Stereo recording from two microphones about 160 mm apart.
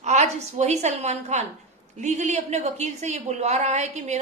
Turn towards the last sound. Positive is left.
turn(degrees=-45)  # may be behind; listen again after turning